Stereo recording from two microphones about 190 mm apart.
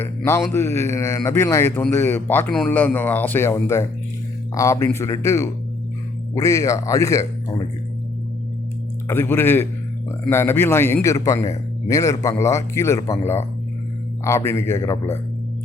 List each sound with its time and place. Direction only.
0.5 s a man's voice: 15° left (ahead or behind)
9.0 s a man's voice: 10° left (ahead or behind)